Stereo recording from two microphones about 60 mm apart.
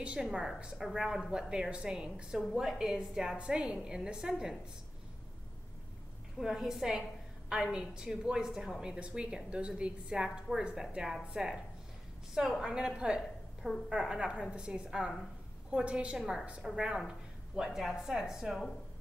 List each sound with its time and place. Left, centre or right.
0.2 s a woman's voice: centre
6.4 s a woman's voice: centre
16.2 s a woman's voice: centre